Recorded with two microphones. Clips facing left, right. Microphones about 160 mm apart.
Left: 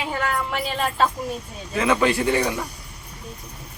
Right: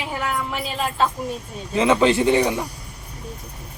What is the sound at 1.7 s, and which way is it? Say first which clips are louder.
Speech: right 3 dB; 20° right (ahead or behind).